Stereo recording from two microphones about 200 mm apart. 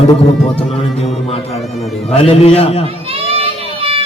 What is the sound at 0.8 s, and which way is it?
Mantra, 30° left (ahead or behind).